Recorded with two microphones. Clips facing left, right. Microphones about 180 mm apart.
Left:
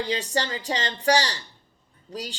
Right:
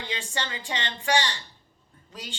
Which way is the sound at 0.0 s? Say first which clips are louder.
Left 7 dB; 40° left (ahead or behind).